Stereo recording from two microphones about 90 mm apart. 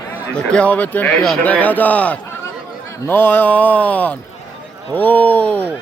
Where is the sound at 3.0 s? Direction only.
25° left (ahead or behind).